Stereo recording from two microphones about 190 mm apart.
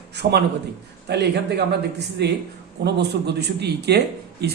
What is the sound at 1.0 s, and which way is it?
Speech, 60° right (ahead or behind).